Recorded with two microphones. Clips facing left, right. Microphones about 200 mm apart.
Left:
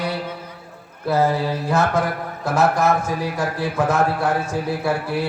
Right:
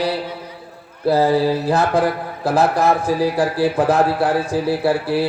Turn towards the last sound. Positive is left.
turn(degrees=-30)  # may be behind; listen again after turning